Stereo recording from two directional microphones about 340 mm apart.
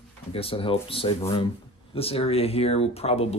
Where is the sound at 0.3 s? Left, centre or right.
Centre.